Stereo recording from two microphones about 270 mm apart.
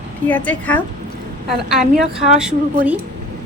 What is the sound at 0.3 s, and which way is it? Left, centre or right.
A woman's voice, centre.